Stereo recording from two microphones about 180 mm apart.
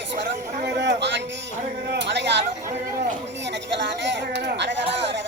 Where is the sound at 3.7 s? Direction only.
80° right.